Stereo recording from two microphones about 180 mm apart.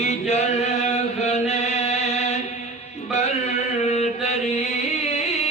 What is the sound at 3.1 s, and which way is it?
Mantra, 40° left (ahead or behind).